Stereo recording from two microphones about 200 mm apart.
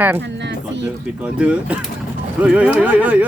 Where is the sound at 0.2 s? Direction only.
60° right (ahead or behind).